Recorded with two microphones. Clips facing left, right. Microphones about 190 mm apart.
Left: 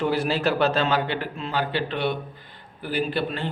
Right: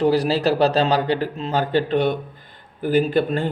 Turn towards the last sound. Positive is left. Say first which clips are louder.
# right 6 dB
turn(degrees=-45)  # may be behind; listen again after turning